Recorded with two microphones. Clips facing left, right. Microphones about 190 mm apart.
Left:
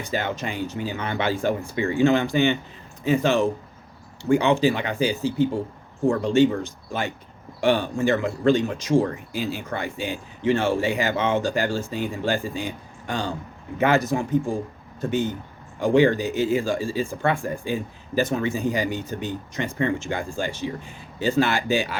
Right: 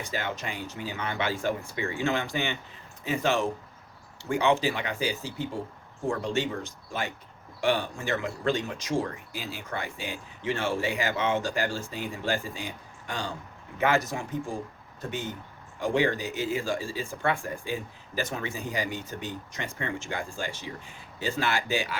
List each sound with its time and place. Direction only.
0.1 s speech: 25° left (ahead or behind)
15.8 s speech: 25° left (ahead or behind)